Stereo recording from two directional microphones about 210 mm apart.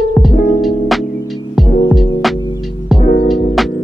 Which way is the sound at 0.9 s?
Centre (ahead or behind).